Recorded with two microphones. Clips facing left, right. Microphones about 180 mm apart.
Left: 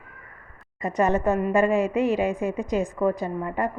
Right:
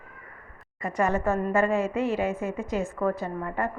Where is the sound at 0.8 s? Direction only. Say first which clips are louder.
Left 3 dB; 20° left (ahead or behind).